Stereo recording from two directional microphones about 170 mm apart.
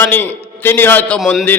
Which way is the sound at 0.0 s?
10° left (ahead or behind).